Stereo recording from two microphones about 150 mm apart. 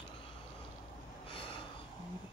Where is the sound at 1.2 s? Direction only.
35° left (ahead or behind).